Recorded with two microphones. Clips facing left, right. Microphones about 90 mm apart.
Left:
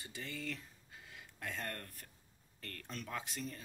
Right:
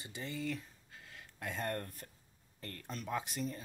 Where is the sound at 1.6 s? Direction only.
25° right (ahead or behind).